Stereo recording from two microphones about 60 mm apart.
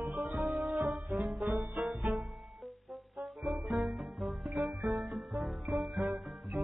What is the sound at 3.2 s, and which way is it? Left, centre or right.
Music, centre.